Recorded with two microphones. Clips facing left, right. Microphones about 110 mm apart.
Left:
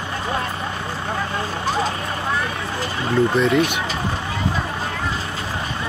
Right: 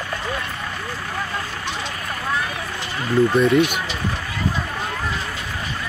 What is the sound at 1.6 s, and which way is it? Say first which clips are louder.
Vehicle: left 7 dB; 40° left (ahead or behind).